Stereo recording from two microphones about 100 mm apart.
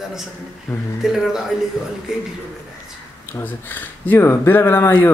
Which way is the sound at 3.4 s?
20° left (ahead or behind).